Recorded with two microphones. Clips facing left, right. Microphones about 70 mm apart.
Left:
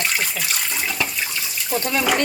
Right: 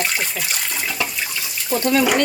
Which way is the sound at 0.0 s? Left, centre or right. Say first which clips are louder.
Right 1 dB; centre.